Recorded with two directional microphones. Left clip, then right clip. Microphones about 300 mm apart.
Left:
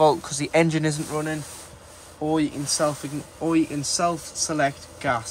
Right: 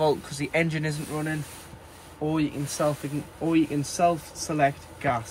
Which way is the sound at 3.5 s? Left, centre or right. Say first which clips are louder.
Left 1 dB; left.